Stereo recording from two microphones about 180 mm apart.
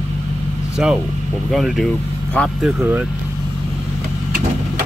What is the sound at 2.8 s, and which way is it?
Speech, 10° right (ahead or behind).